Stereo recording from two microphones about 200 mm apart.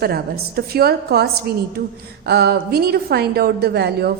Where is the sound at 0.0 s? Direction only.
50° right (ahead or behind).